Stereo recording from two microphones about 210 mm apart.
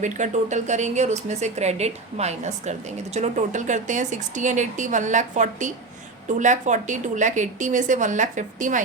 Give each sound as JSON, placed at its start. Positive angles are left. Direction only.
{"t": 0.0, "sound": "speech", "side_deg": -35}